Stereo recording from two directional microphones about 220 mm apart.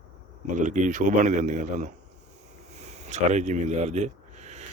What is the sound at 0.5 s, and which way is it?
Speech, 35° right (ahead or behind).